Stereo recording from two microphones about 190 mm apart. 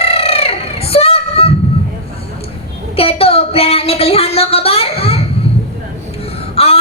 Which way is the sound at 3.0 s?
30° left (ahead or behind).